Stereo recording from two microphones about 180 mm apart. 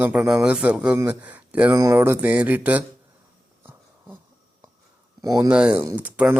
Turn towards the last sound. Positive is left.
turn(degrees=-10)  # may be behind; listen again after turning